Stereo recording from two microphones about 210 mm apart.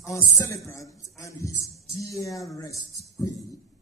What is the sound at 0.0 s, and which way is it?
A man's voice, 15° left (ahead or behind).